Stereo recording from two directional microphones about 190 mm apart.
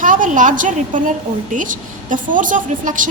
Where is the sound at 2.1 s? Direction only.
45° right (ahead or behind).